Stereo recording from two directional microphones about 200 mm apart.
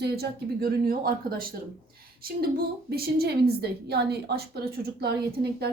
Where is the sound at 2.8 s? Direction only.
50° right (ahead or behind).